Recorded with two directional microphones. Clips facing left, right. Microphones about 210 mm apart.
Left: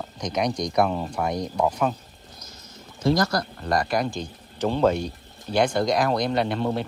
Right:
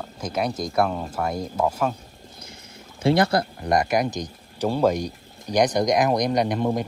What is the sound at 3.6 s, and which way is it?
Speech, 20° right (ahead or behind).